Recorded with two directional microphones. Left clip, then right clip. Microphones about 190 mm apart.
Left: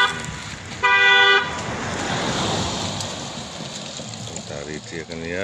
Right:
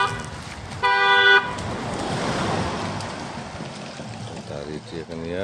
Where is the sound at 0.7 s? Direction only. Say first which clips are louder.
Left 3 dB; 20° right (ahead or behind).